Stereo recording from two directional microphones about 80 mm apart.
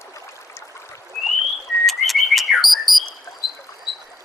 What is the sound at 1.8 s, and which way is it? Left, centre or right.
Bird, centre.